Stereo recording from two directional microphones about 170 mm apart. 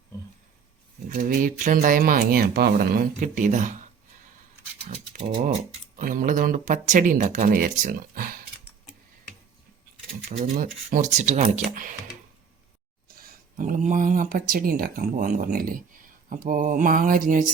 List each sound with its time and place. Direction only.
1.1 s speech: 55° right (ahead or behind)
6.0 s speech: 55° right (ahead or behind)
10.9 s speech: 45° right (ahead or behind)
13.2 s speech: 50° right (ahead or behind)